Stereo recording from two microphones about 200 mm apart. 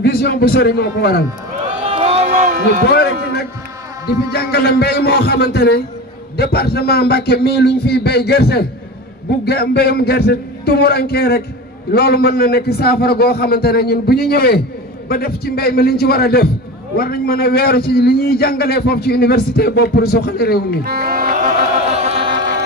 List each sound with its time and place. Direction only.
0.0 s a man's voice: 50° left (ahead or behind)
2.0 s a sound: 30° right (ahead or behind)
2.9 s a man's voice: 55° left (ahead or behind)
20.8 s music: 50° right (ahead or behind); by 22.3 s 30° right (ahead or behind)